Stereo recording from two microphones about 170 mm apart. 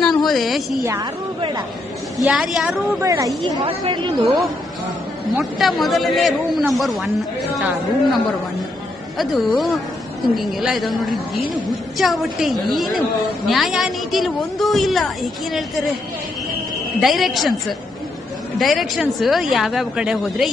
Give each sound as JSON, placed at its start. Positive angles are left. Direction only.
{"t": 0.0, "sound": "a sound", "side_deg": 0}
{"t": 2.1, "sound": "a man's voice", "side_deg": 0}
{"t": 3.0, "sound": "speech", "side_deg": -20}
{"t": 3.6, "sound": "a woman's voice", "side_deg": -30}
{"t": 5.4, "sound": "a man's voice", "side_deg": 0}
{"t": 9.2, "sound": "a man's voice", "side_deg": 0}
{"t": 17.0, "sound": "a man's voice", "side_deg": 0}
{"t": 18.6, "sound": "a man's voice", "side_deg": 0}